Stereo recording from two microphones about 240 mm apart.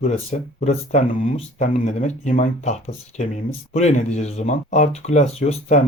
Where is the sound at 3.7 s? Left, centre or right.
Left.